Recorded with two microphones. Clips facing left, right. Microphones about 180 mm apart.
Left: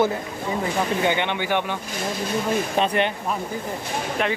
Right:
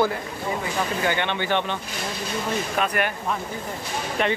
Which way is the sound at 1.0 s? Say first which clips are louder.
Left 2 dB; 15° left (ahead or behind).